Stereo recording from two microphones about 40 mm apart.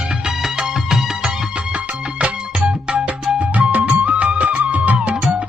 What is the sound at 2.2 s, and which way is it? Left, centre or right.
Music, right.